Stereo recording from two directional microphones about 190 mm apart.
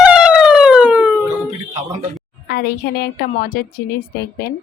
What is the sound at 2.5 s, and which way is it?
A woman's voice, 55° left (ahead or behind).